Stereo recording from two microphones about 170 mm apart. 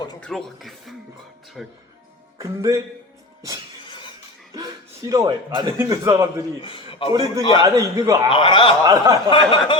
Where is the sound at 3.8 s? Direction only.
30° left (ahead or behind).